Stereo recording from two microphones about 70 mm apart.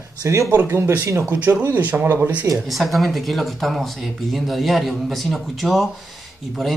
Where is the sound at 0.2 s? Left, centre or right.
Right.